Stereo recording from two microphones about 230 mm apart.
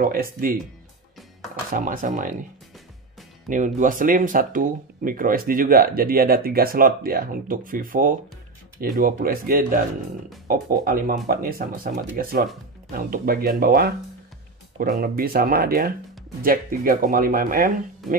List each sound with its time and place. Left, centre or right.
0.0 s speech: right
1.7 s speech: right
3.4 s speech: right